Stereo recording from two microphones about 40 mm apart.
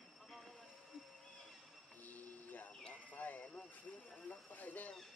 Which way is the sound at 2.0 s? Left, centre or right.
Left.